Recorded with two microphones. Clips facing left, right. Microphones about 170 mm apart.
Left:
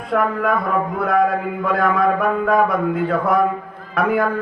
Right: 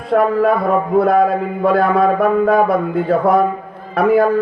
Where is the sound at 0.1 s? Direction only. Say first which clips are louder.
Right 6 dB; 30° right (ahead or behind).